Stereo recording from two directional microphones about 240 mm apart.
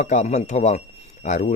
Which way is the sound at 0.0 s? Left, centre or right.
Left.